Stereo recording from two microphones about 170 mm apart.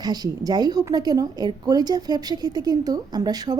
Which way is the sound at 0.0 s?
25° right (ahead or behind).